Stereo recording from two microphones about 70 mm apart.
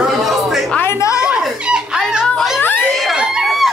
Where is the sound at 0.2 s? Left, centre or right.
Centre.